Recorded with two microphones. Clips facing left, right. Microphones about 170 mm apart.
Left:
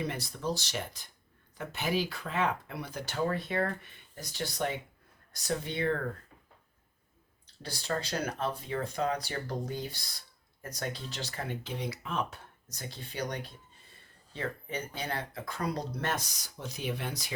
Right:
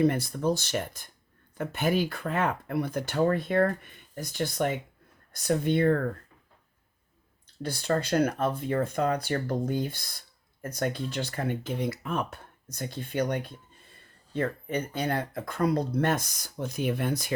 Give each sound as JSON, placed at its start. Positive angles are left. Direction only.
{"t": 0.0, "sound": "speech", "side_deg": -50}
{"t": 7.6, "sound": "speech", "side_deg": -55}